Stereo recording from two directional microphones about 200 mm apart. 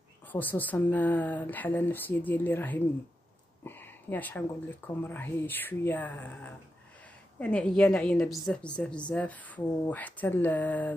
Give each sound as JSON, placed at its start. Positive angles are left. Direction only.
{"t": 0.3, "sound": "a woman's voice", "side_deg": 10}